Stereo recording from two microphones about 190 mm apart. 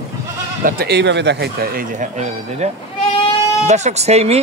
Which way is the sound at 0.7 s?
55° right (ahead or behind).